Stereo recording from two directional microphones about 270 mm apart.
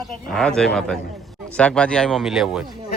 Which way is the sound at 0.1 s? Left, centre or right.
Centre.